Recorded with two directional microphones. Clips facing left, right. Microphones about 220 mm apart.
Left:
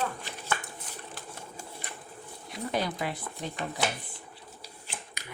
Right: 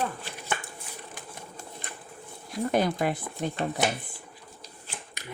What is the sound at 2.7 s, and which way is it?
Speech, 50° right (ahead or behind).